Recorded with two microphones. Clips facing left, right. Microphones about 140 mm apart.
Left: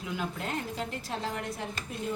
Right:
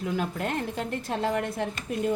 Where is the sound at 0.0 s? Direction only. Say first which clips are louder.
Right 6 dB; 50° right (ahead or behind).